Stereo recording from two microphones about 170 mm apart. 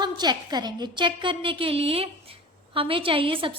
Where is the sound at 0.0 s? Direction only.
25° right (ahead or behind).